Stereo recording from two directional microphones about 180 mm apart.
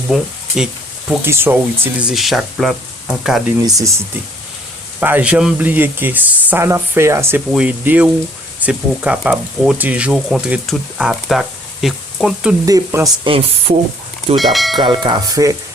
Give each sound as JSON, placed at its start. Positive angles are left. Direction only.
{"t": 0.1, "sound": "speech", "side_deg": -5}
{"t": 3.6, "sound": "speech", "side_deg": -20}
{"t": 4.9, "sound": "speech", "side_deg": -10}
{"t": 12.6, "sound": "speech", "side_deg": -15}
{"t": 13.2, "sound": "speech", "side_deg": -30}
{"t": 14.3, "sound": "speech", "side_deg": 0}
{"t": 14.8, "sound": "speech", "side_deg": -25}